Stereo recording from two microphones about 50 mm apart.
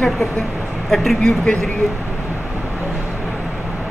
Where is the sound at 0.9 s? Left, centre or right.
Centre.